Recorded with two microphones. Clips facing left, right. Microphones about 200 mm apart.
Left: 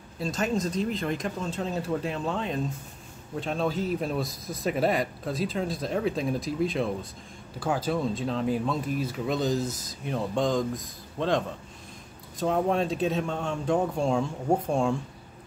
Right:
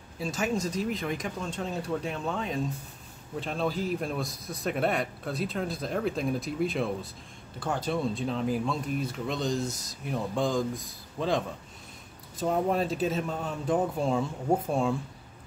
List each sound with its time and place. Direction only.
0.2 s a man's voice: centre (ahead or behind)